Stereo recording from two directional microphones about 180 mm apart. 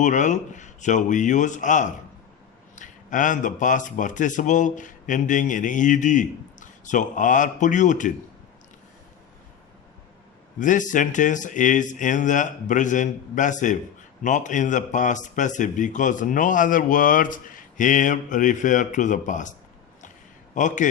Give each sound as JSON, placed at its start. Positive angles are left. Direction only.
{"t": 0.0, "sound": "speech", "side_deg": 45}
{"t": 10.6, "sound": "speech", "side_deg": 45}
{"t": 20.6, "sound": "speech", "side_deg": 45}